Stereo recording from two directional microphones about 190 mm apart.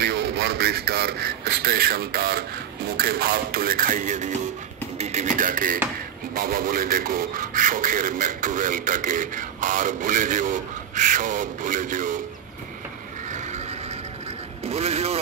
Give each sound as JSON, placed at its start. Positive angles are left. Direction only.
{"t": 0.0, "sound": "a man's voice", "side_deg": -60}
{"t": 4.9, "sound": "beatboxing", "side_deg": -35}
{"t": 6.3, "sound": "a man's voice", "side_deg": -45}
{"t": 14.7, "sound": "speech", "side_deg": -35}